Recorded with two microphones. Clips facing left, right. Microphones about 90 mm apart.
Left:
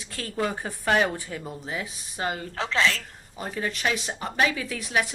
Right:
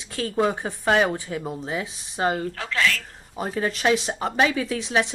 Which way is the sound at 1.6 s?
25° right (ahead or behind).